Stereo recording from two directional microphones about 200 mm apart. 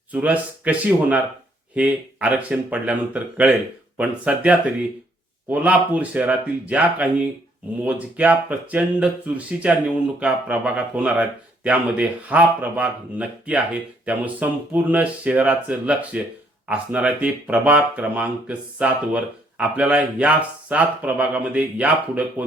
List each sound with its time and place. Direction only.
0.1 s speech: 10° right (ahead or behind)